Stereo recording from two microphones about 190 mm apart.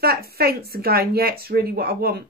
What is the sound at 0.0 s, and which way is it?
Speech, 55° right (ahead or behind).